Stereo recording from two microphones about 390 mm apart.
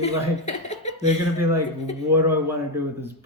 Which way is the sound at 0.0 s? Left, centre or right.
Centre.